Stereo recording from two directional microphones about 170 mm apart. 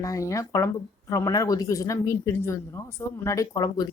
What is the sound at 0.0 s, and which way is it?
Speech, 20° left (ahead or behind).